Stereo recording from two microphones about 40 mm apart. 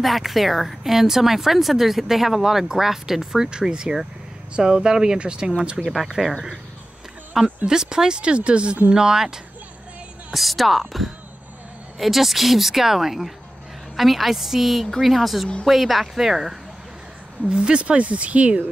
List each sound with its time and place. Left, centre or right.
0.0 s speech: centre; by 5.5 s right
5.9 s speech: centre
7.4 s speech: centre
8.9 s speech: centre
10.3 s a woman's voice: centre
17.5 s speech: right